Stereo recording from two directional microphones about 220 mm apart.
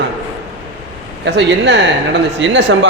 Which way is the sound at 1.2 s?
50° right (ahead or behind).